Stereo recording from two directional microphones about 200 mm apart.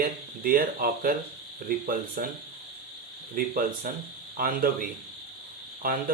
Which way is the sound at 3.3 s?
45° right (ahead or behind).